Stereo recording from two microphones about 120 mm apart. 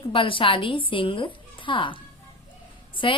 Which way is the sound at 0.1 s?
45° left (ahead or behind).